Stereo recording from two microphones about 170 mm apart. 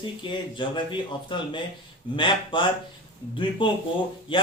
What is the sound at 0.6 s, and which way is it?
Speech, 30° left (ahead or behind).